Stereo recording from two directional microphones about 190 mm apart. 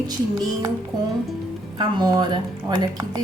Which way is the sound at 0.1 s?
20° right (ahead or behind).